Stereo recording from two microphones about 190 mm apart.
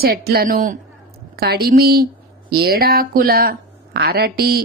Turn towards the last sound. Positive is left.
turn(degrees=-55)  # may be behind; listen again after turning